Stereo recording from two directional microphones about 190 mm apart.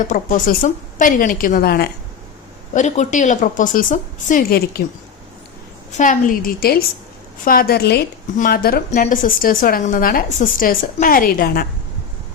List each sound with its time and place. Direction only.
0.0 s a woman's voice: 45° left (ahead or behind)
2.7 s a woman's voice: 40° left (ahead or behind)
6.0 s a woman's voice: 45° left (ahead or behind)